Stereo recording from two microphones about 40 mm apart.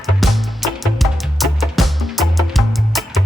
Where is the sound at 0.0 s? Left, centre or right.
Centre.